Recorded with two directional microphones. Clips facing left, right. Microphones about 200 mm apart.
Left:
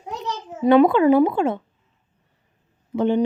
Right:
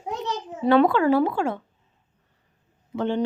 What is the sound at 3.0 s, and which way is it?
Speech, 15° left (ahead or behind).